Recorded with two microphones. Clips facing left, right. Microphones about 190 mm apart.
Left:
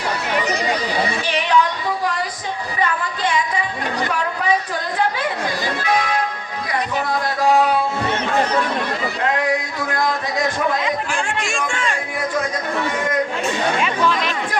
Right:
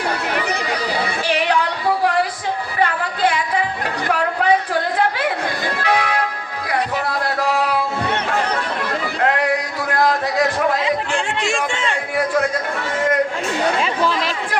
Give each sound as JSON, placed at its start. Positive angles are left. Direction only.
{"t": 1.5, "sound": "a sound", "side_deg": -65}
{"t": 2.7, "sound": "music", "side_deg": -65}
{"t": 4.1, "sound": "a sound", "side_deg": -60}
{"t": 5.7, "sound": "music", "side_deg": -65}
{"t": 7.3, "sound": "music", "side_deg": -65}
{"t": 9.9, "sound": "music", "side_deg": -65}
{"t": 10.8, "sound": "a sound", "side_deg": -20}
{"t": 12.1, "sound": "chatter", "side_deg": -60}
{"t": 13.8, "sound": "chatter", "side_deg": -30}